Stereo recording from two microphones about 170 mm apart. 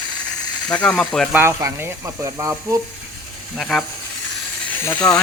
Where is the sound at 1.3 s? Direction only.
15° right (ahead or behind).